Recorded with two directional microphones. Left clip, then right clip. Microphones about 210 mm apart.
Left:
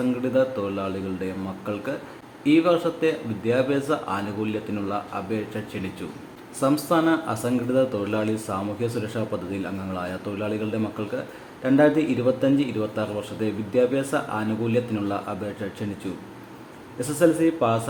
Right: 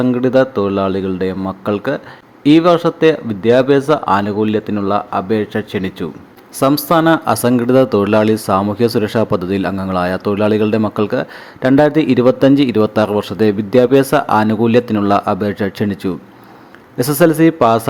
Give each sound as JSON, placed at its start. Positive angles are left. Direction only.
{"t": 0.0, "sound": "speech", "side_deg": -40}
{"t": 17.0, "sound": "a man's voice", "side_deg": -40}